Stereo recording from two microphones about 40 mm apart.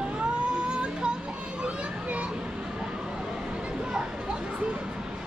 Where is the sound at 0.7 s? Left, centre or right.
Right.